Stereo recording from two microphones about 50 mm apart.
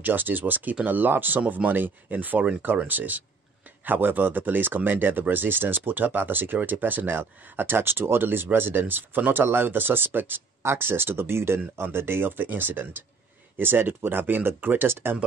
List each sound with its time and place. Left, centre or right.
0.0 s speech: right
10.6 s speech: right